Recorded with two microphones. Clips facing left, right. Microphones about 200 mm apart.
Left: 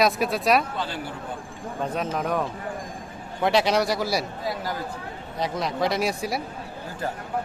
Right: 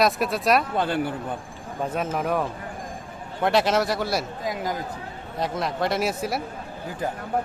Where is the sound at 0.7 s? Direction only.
55° right (ahead or behind).